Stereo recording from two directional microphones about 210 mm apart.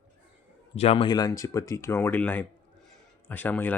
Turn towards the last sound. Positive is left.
turn(degrees=10)  # may be behind; listen again after turning